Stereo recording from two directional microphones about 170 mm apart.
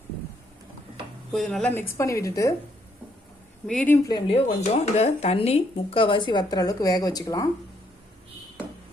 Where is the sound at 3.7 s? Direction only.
5° left (ahead or behind).